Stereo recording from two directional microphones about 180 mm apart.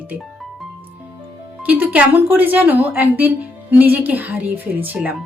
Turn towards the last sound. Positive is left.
turn(degrees=-10)  # may be behind; listen again after turning